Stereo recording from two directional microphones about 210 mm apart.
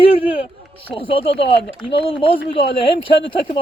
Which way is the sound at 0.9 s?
25° left (ahead or behind).